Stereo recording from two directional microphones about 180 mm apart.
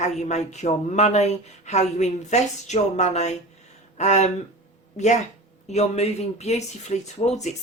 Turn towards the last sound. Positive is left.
turn(degrees=40)  # may be behind; listen again after turning